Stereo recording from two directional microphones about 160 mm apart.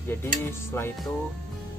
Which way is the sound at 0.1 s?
15° left (ahead or behind).